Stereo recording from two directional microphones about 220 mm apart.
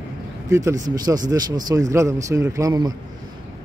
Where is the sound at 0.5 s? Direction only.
15° right (ahead or behind).